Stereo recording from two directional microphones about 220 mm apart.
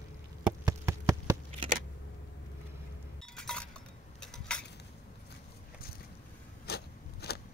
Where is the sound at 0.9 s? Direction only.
15° right (ahead or behind).